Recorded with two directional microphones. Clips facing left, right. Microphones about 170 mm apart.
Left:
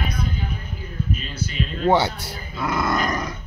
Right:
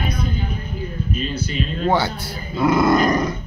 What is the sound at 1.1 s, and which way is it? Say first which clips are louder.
Speech: right 7 dB; 5° left (ahead or behind).